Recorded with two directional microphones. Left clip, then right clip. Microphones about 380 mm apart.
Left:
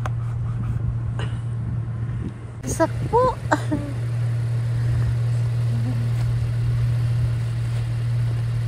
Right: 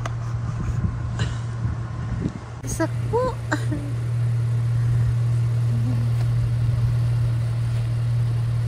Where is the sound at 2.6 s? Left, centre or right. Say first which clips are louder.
Left 5 dB; centre.